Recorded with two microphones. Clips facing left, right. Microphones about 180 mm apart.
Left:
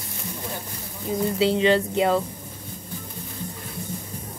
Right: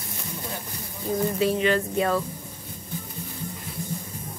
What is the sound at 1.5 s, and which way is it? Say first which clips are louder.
Speech: left 3 dB; 30° left (ahead or behind).